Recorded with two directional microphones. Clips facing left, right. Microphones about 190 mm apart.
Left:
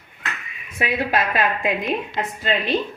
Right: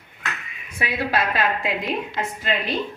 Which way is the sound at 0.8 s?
15° left (ahead or behind).